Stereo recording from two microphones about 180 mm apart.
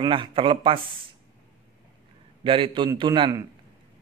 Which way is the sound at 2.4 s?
30° right (ahead or behind).